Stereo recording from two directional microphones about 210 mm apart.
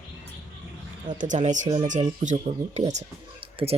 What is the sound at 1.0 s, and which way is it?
Speech, 35° right (ahead or behind).